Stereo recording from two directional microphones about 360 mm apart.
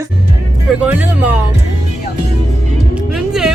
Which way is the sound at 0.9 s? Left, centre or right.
Centre.